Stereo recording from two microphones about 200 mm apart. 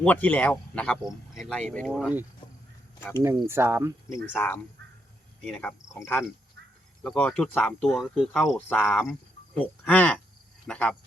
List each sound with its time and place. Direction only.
0.0 s speech: 5° left (ahead or behind)
3.0 s speech: 15° left (ahead or behind)
3.2 s speech: 10° right (ahead or behind)
4.1 s speech: 10° left (ahead or behind)